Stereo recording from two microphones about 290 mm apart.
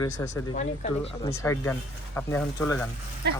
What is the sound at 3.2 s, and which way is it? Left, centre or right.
Speech, right.